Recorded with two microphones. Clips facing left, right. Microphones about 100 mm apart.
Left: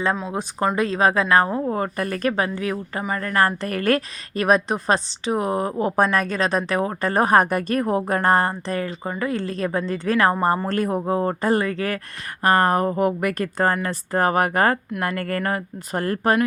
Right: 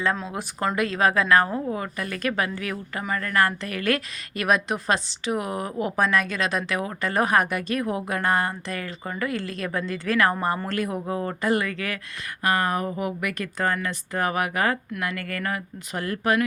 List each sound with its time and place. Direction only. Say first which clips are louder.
0.8 s a woman's voice: left 2 dB; 30° left (ahead or behind)
1.7 s a woman's voice: left 5 dB; 40° left (ahead or behind)
3.6 s a woman's voice: left 5 dB; 45° left (ahead or behind)